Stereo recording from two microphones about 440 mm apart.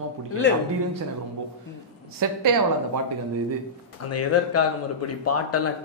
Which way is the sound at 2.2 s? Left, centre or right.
Right.